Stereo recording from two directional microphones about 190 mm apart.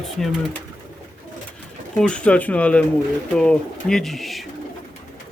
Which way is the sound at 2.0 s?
5° left (ahead or behind).